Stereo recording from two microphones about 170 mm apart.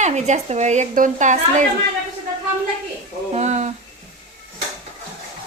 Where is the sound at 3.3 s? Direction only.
40° right (ahead or behind).